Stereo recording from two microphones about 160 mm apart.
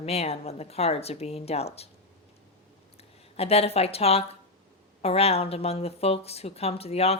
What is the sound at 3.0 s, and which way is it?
Speech, 40° left (ahead or behind).